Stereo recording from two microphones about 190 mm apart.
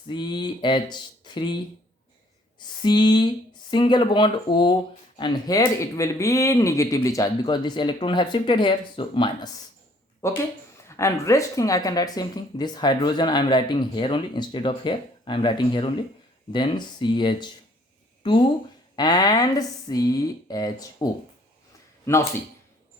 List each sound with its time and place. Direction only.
0.1 s speech: 25° left (ahead or behind)
2.8 s speech: 20° left (ahead or behind)
10.8 s speech: 15° left (ahead or behind)